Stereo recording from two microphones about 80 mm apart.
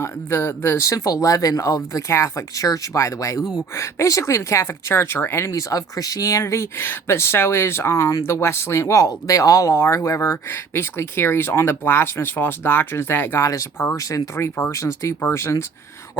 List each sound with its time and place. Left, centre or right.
0.0 s speech: left
5.5 s speech: left
13.4 s speech: left
14.7 s speech: left